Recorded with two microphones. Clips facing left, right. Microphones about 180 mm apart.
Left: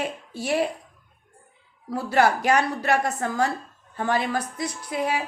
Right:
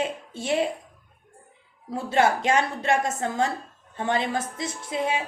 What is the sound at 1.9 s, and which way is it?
A woman's voice, 25° right (ahead or behind).